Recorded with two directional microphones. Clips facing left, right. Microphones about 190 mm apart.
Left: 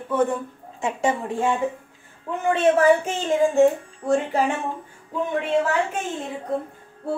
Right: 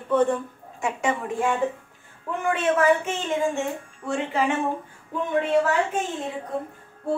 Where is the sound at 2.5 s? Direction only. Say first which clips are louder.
Left 4 dB; 35° left (ahead or behind).